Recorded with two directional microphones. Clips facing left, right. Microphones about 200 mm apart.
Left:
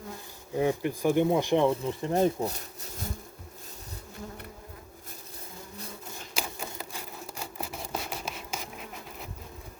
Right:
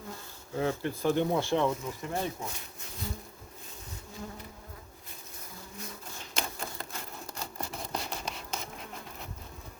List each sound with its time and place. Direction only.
0.5 s speech: 15° left (ahead or behind)
1.7 s speech: 30° left (ahead or behind)
2.1 s speech: 40° left (ahead or behind)
6.3 s a sound: 5° left (ahead or behind)